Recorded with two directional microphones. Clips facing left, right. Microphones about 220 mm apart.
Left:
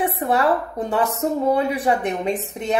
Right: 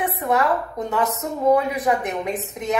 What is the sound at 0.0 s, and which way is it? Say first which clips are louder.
A woman's voice: left 2 dB; 30° left (ahead or behind).